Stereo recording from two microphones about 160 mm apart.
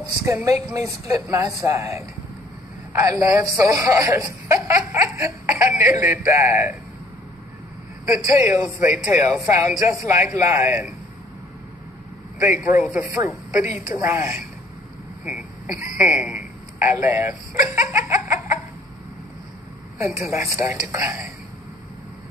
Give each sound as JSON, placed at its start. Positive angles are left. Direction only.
{"t": 0.2, "sound": "speech", "side_deg": -15}
{"t": 8.3, "sound": "speech", "side_deg": -20}
{"t": 12.4, "sound": "speech", "side_deg": -15}
{"t": 15.2, "sound": "speech", "side_deg": -5}
{"t": 16.0, "sound": "a sound", "side_deg": -10}
{"t": 17.0, "sound": "speech", "side_deg": -15}
{"t": 20.2, "sound": "speech", "side_deg": -20}